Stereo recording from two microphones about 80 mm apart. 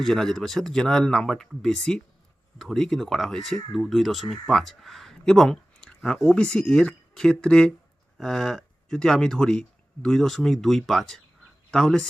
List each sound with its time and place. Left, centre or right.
0.0 s speech: centre